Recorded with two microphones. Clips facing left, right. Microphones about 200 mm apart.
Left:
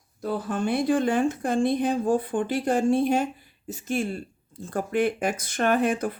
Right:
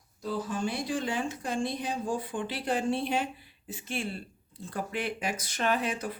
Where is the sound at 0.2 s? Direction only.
60° left (ahead or behind).